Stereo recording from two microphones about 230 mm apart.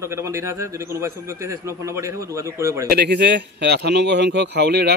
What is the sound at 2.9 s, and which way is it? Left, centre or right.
Speech, right.